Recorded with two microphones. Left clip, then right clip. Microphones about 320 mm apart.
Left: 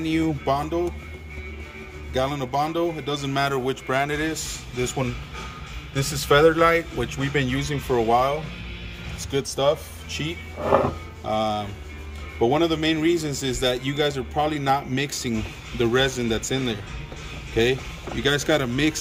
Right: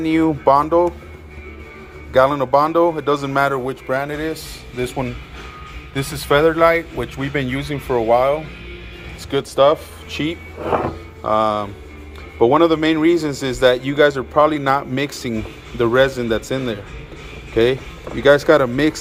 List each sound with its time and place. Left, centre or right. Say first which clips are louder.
0.0 s a man's voice: right 8 dB; centre
2.1 s a man's voice: right 10 dB; centre
5.9 s a man's voice: right 3 dB; centre
9.3 s a man's voice: right 8 dB; centre
18.2 s a man's voice: right 10 dB; centre